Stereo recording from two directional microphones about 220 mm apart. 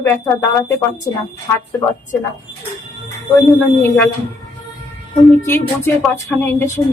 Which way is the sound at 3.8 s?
10° left (ahead or behind).